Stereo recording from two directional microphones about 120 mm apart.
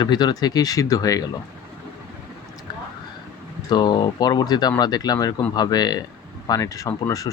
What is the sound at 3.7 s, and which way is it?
Speech, 35° left (ahead or behind).